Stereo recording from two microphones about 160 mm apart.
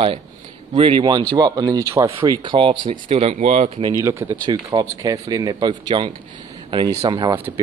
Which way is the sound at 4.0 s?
15° right (ahead or behind).